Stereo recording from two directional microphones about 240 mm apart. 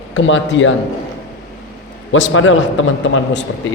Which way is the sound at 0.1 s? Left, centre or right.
Left.